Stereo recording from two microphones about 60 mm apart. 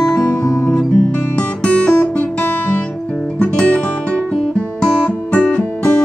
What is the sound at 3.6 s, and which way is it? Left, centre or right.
Music, centre.